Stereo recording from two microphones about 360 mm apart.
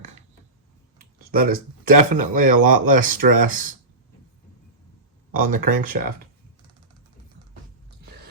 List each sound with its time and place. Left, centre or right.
0.9 s speech: right
5.3 s speech: right